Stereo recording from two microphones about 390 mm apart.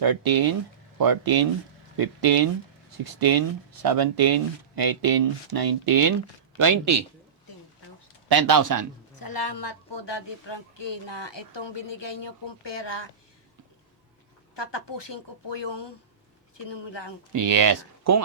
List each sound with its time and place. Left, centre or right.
0.0 s speech: right
8.3 s speech: right
9.1 s speech: left
14.5 s speech: left
17.3 s speech: right